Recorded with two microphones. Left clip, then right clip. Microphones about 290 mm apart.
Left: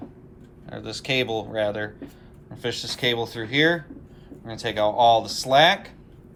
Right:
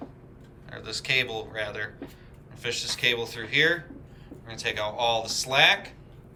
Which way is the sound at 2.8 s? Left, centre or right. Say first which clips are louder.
Left 1 dB; centre.